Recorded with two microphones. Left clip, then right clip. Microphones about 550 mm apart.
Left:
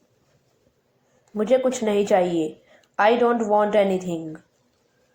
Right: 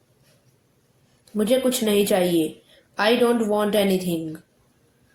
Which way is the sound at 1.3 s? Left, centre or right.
Right.